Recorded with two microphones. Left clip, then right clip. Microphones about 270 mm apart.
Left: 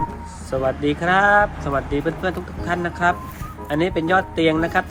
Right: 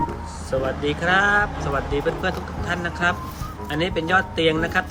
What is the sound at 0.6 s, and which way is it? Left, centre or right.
Speech, centre.